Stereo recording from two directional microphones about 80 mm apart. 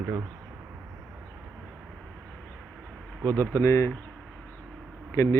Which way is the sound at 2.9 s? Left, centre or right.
Centre.